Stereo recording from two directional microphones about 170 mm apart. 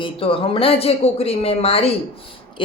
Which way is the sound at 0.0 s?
30° left (ahead or behind).